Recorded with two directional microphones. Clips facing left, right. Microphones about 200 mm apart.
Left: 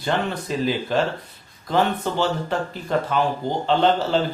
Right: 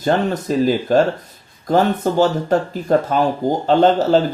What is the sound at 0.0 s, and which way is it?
Speech, 40° right (ahead or behind).